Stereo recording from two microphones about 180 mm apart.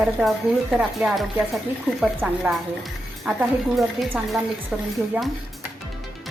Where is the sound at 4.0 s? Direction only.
Centre (ahead or behind).